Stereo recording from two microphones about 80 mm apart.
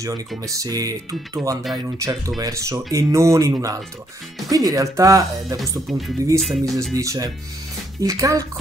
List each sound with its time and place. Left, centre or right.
0.5 s speech: right
5.9 s speech: centre
6.9 s speech: right